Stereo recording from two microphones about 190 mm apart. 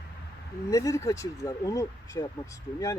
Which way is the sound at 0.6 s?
15° left (ahead or behind).